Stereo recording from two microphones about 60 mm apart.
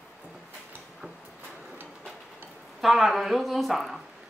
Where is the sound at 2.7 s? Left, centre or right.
Centre.